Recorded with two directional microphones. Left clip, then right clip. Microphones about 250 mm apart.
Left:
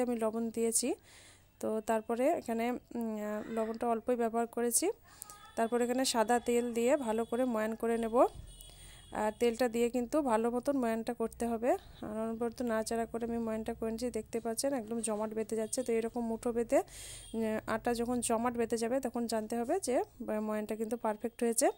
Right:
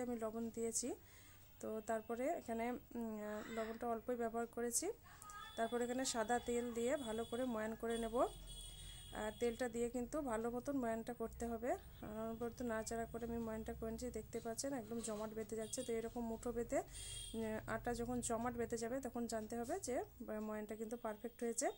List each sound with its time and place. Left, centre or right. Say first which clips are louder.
0.0 s speech: left 11 dB; left